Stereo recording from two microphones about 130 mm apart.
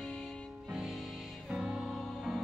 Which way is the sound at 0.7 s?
5° right (ahead or behind).